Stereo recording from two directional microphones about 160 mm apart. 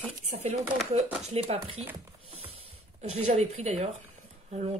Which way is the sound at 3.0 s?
45° right (ahead or behind).